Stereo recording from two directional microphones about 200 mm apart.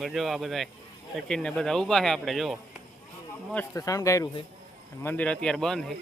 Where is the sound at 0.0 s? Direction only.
Centre (ahead or behind).